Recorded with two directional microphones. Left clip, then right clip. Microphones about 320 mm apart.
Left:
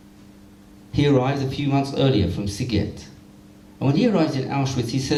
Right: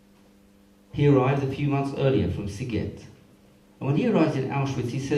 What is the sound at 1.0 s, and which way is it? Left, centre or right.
A man's voice, left.